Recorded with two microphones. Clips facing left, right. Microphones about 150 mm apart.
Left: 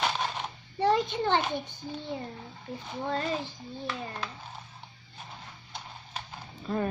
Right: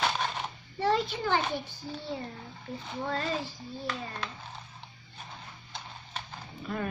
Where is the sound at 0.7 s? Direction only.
20° left (ahead or behind).